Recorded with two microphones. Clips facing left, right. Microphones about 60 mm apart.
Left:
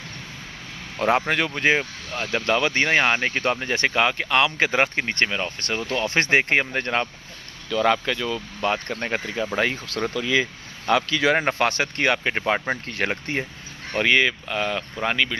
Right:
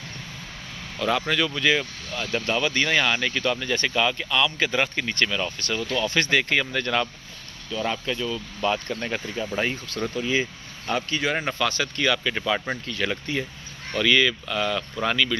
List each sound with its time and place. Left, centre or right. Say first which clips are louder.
0.9 s speech: left 3 dB; left
2.3 s speech: left 3 dB; left
6.0 s speech: left 4 dB; left
7.7 s speech: left 6 dB; left
8.5 s speech: even; left
9.2 s speech: left 3 dB; left
10.2 s speech: left 2 dB; left
12.9 s speech: right 1 dB; left
13.9 s speech: left 1 dB; left